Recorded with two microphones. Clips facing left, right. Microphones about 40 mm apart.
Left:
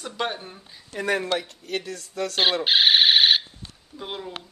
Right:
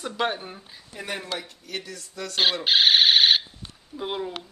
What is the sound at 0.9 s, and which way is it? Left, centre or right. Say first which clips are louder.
Speech: left 8 dB; left.